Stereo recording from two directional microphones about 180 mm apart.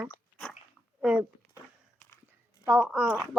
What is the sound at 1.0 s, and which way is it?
Speech, 10° right (ahead or behind).